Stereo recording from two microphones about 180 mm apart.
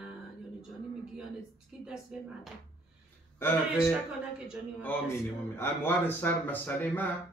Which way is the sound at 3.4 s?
10° left (ahead or behind).